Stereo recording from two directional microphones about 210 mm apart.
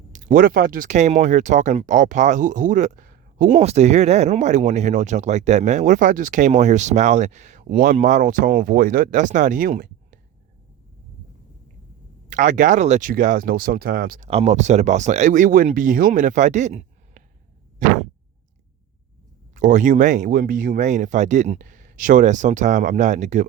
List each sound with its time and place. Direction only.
0.1 s speech: 35° right (ahead or behind)
12.3 s speech: 40° right (ahead or behind)
14.3 s speech: 30° right (ahead or behind)
19.5 s speech: 40° right (ahead or behind)